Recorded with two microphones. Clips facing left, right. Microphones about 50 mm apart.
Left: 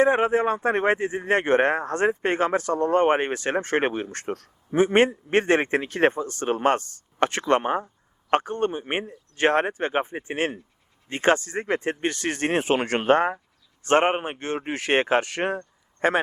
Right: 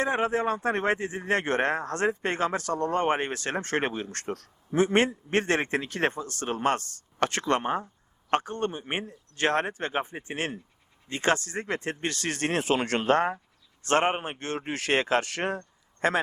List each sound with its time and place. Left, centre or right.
0.0 s a man's voice: left